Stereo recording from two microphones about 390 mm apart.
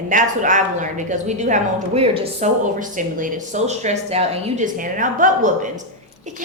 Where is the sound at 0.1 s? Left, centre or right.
Centre.